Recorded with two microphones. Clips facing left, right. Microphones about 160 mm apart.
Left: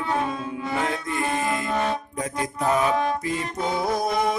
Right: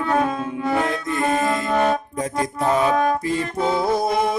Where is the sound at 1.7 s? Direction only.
50° right (ahead or behind).